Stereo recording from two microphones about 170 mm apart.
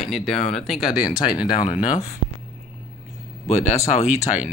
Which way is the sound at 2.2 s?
30° left (ahead or behind).